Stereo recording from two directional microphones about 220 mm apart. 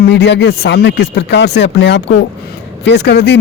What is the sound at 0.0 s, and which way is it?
Speech, 50° left (ahead or behind).